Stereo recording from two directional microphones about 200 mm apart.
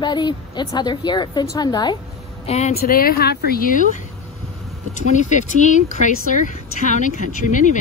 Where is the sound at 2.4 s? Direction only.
30° left (ahead or behind).